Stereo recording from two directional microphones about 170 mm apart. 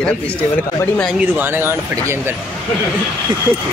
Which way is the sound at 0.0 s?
10° left (ahead or behind).